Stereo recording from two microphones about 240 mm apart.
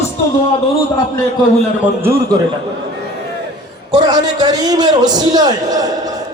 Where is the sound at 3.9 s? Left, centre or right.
Centre.